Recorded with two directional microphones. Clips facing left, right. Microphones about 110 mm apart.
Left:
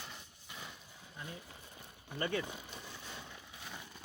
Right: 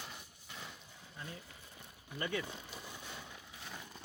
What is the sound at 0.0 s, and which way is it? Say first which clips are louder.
Horse: even; centre (ahead or behind).